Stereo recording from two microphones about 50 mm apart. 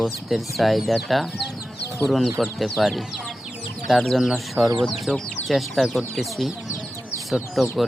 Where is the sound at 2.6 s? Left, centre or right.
Centre.